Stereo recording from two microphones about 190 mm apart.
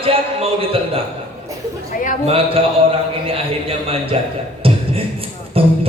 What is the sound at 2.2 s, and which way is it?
Speech, 30° right (ahead or behind).